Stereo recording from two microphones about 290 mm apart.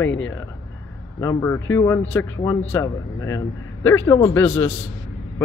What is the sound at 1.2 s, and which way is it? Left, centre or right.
Speech, centre.